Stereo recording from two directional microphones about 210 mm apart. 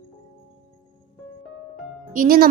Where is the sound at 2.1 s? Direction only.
40° right (ahead or behind).